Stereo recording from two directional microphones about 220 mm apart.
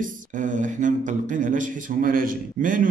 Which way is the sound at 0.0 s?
35° right (ahead or behind).